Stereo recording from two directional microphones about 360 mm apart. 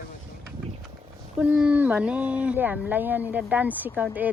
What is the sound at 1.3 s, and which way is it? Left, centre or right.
Speech, centre.